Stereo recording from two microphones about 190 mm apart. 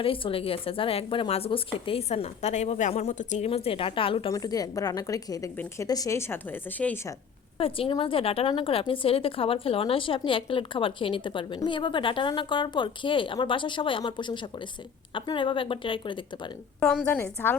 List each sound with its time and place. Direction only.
0.0 s speech: 30° left (ahead or behind); by 7.1 s 10° left (ahead or behind)
7.6 s speech: 30° left (ahead or behind)
16.8 s a woman's voice: 5° left (ahead or behind)